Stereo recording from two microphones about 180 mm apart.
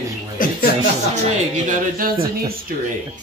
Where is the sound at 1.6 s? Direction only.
50° right (ahead or behind).